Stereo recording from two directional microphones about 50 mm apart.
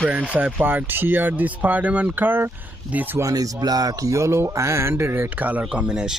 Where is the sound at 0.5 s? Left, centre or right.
Right.